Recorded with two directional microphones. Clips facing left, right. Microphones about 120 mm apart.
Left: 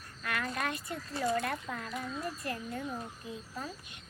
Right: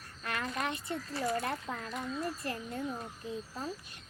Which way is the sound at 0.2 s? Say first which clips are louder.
Left 1 dB; 30° right (ahead or behind).